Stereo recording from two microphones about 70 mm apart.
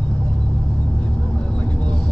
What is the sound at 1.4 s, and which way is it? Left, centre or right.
Vehicle, centre.